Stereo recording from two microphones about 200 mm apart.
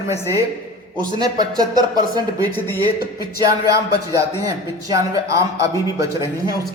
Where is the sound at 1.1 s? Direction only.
20° right (ahead or behind).